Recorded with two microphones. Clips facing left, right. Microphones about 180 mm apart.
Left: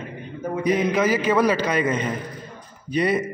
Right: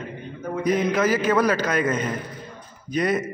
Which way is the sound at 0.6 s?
10° left (ahead or behind).